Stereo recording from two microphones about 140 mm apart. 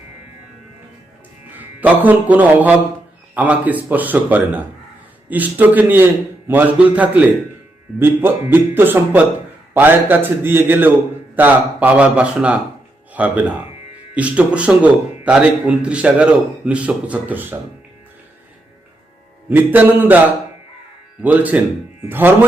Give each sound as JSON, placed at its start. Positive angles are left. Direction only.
{"t": 1.5, "sound": "a man's voice", "side_deg": -10}
{"t": 19.5, "sound": "a man's voice", "side_deg": -15}